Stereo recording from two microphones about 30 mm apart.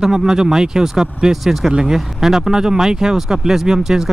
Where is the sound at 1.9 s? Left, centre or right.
Centre.